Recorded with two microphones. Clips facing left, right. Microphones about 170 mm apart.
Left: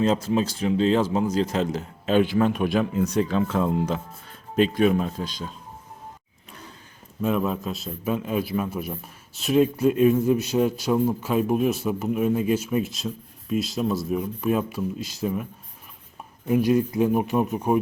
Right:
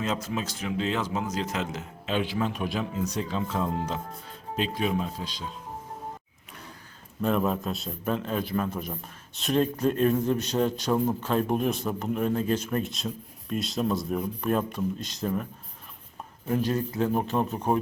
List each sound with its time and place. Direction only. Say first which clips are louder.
0.0 s speech: left 8 dB; 30° left (ahead or behind); by 5.5 s 50° left (ahead or behind)
7.2 s a man's voice: left 1 dB; centre (ahead or behind)
16.5 s a man's voice: left 6 dB; 10° left (ahead or behind)